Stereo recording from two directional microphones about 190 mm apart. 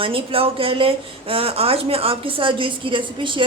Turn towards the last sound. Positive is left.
turn(degrees=-25)  # may be behind; listen again after turning